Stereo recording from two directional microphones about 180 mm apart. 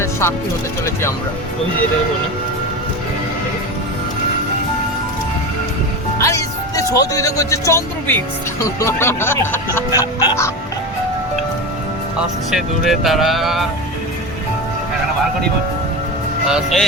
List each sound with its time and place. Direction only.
0.0 s music: 15° left (ahead or behind)
6.1 s speech: 15° left (ahead or behind)
12.5 s speech: centre (ahead or behind)
16.5 s speech: 5° right (ahead or behind)